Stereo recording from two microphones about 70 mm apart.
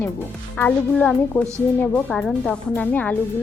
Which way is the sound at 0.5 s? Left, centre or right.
Centre.